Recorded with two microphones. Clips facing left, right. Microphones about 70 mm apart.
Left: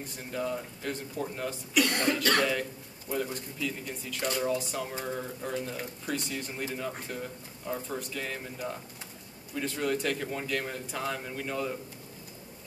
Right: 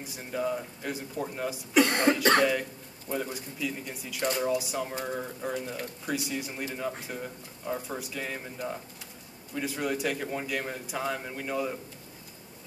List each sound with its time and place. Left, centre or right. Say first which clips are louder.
0.0 s speech: right 2 dB; centre
1.7 s speech: right 4 dB; right
3.1 s speech: even; centre